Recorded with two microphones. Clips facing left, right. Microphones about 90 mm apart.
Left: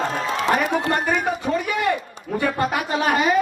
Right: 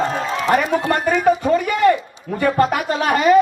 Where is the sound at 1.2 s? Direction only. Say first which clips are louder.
Right 7 dB; 50° right (ahead or behind).